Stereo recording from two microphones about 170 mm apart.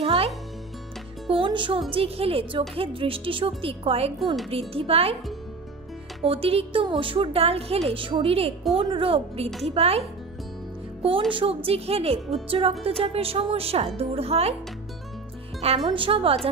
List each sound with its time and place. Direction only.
0.0 s music: 35° right (ahead or behind)
1.3 s a woman's voice: 30° right (ahead or behind)
6.2 s a woman's voice: 35° right (ahead or behind)
15.8 s a woman's voice: 30° right (ahead or behind)